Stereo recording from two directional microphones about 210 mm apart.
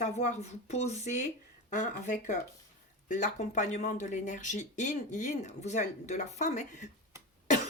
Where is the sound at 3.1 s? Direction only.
40° left (ahead or behind).